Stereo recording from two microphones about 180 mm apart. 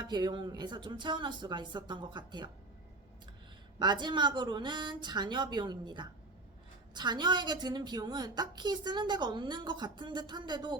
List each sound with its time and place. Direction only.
0.0 s a woman's voice: 25° right (ahead or behind)
3.8 s a woman's voice: 25° right (ahead or behind)